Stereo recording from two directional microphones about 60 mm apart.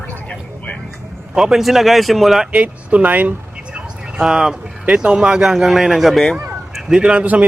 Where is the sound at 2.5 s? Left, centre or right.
Right.